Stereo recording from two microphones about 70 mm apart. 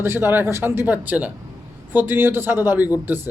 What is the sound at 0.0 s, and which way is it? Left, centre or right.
A man's voice, right.